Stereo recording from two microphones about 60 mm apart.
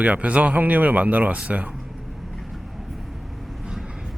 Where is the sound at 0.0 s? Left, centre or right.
Right.